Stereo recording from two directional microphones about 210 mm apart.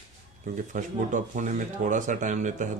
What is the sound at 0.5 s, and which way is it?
Speech, 35° right (ahead or behind).